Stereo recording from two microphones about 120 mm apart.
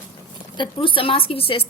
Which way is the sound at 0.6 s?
45° left (ahead or behind).